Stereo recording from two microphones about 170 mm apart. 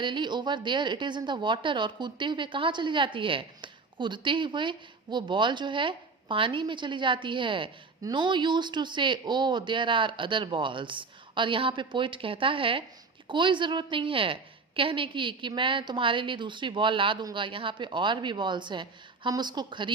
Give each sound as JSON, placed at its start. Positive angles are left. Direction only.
{"t": 0.0, "sound": "a woman's voice", "side_deg": -25}